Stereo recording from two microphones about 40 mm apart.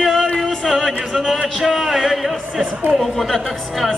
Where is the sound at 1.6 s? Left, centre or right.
Centre.